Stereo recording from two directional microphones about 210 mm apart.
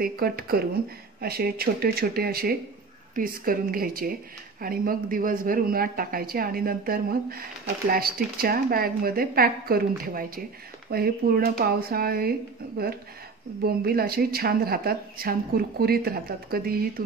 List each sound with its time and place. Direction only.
0.0 s speech: 45° right (ahead or behind)